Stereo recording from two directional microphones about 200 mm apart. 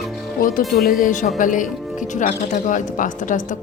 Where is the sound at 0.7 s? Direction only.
45° left (ahead or behind).